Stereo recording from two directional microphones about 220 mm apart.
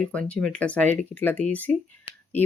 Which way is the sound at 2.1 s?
25° left (ahead or behind).